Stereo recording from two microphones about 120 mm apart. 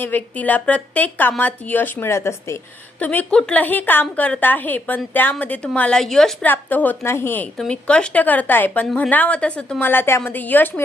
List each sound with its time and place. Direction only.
0.0 s a woman's voice: 15° left (ahead or behind)
6.4 s a woman's voice: 15° left (ahead or behind)